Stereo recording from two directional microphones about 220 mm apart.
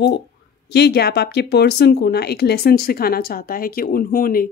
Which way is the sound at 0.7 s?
50° left (ahead or behind).